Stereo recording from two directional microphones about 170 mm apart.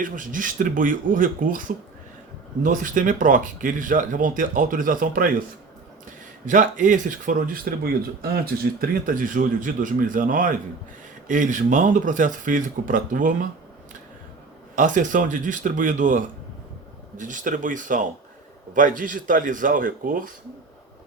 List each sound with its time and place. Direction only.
0.0 s speech: 50° right (ahead or behind)
6.4 s speech: 50° right (ahead or behind)
14.8 s speech: 50° right (ahead or behind)